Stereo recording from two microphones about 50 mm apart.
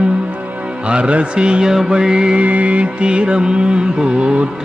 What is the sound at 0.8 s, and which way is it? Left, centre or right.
Mantra, right.